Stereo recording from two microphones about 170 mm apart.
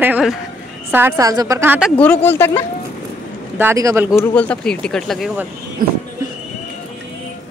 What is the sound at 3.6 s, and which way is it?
Speech, 15° right (ahead or behind).